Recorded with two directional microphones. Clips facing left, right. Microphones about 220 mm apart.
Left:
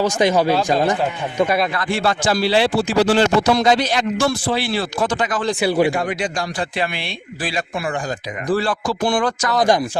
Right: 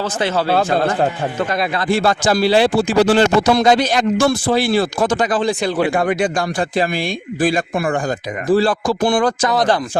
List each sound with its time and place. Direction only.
0.0 s speech: 15° left (ahead or behind)
1.7 s speech: 35° right (ahead or behind)
5.5 s speech: 10° left (ahead or behind)
5.9 s speech: 55° right (ahead or behind)
6.7 s speech: 45° right (ahead or behind)
8.4 s speech: 30° right (ahead or behind)
8.9 s speech: 50° right (ahead or behind)